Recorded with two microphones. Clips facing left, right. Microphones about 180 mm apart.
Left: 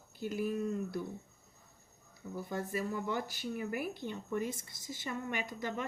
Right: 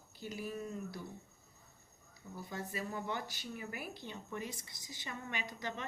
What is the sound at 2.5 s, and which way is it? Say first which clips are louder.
A woman's voice: left 5 dB; 50° left (ahead or behind).